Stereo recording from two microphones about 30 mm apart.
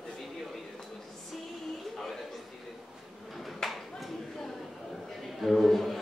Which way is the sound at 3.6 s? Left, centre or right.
Centre.